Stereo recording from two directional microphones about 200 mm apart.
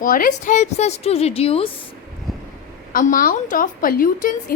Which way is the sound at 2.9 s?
45° left (ahead or behind).